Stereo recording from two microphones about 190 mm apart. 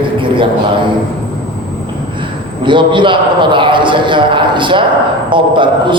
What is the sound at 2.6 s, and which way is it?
A man's voice, 25° right (ahead or behind).